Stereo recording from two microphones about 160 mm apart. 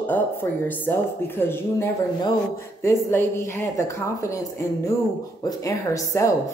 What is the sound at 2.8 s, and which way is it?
A woman's voice, 15° left (ahead or behind).